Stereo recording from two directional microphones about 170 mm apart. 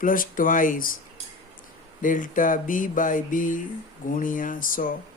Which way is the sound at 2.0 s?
50° left (ahead or behind).